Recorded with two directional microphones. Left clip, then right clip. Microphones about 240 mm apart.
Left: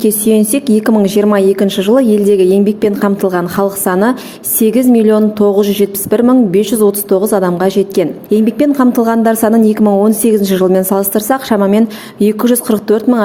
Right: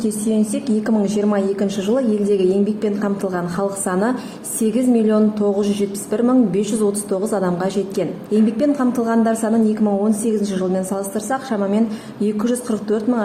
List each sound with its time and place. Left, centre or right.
0.0 s a woman's voice: left